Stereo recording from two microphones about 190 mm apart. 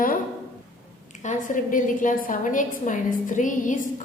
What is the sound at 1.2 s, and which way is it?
A woman's voice, 40° left (ahead or behind).